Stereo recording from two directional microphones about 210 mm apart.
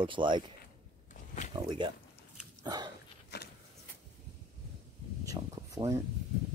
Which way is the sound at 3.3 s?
55° left (ahead or behind).